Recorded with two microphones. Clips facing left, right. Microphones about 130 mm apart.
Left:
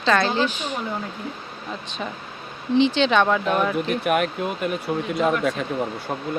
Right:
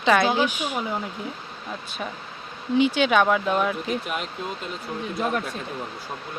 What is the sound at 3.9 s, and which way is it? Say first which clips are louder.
Speech: left 7 dB; 60° left (ahead or behind).